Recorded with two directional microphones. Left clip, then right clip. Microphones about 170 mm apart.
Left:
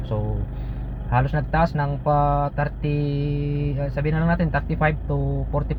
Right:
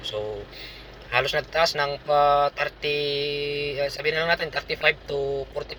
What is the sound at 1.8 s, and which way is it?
Mantra, 5° right (ahead or behind).